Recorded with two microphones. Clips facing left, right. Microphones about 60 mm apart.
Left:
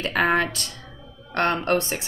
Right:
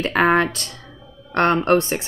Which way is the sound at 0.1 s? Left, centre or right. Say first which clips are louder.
Right 4 dB; right.